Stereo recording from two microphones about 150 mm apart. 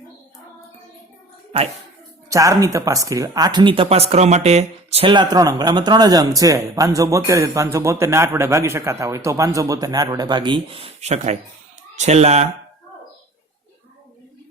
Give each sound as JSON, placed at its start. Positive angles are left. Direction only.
{"t": 2.3, "sound": "speech", "side_deg": -20}